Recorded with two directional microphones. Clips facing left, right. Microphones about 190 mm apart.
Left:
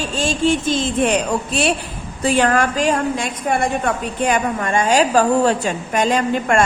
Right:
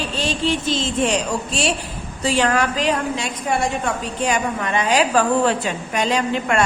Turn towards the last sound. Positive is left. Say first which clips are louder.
# left 3 dB
turn(degrees=50)  # may be behind; listen again after turning